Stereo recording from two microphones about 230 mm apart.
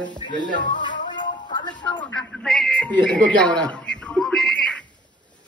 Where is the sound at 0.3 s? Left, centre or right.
Left.